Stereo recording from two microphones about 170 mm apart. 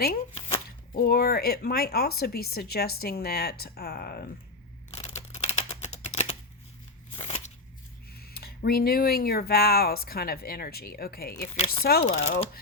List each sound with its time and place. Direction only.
0.9 s speech: 65° left (ahead or behind)
5.3 s typing: 40° left (ahead or behind)
7.2 s a sound: 35° left (ahead or behind)
8.1 s speech: 65° left (ahead or behind)
11.5 s speech: 35° left (ahead or behind)
11.8 s speech: 65° left (ahead or behind)
12.0 s speech: 45° left (ahead or behind)